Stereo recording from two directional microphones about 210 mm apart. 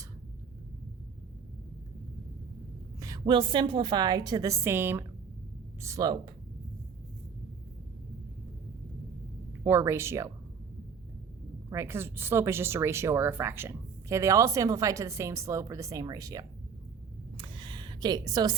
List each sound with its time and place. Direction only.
3.0 s a woman's voice: 20° right (ahead or behind)
9.6 s speech: 10° right (ahead or behind)
11.7 s speech: 10° right (ahead or behind)
17.3 s a sound: 25° right (ahead or behind)